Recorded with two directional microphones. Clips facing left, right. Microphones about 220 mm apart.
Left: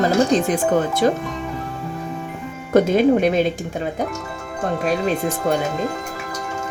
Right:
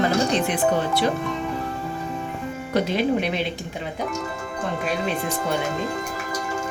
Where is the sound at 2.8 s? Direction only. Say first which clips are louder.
Left 7 dB; 45° left (ahead or behind).